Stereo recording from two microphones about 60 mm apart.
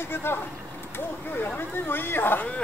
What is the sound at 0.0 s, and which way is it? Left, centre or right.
Speech, left.